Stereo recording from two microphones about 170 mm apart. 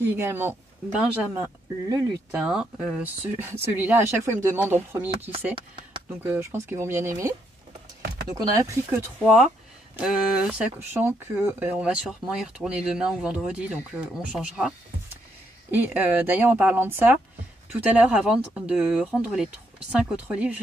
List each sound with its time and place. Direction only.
0.0 s speech: 10° right (ahead or behind)
2.3 s speech: 5° right (ahead or behind)
3.7 s speech: 10° right (ahead or behind)
15.7 s speech: 10° right (ahead or behind)